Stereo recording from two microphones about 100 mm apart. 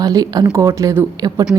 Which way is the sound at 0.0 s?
40° right (ahead or behind).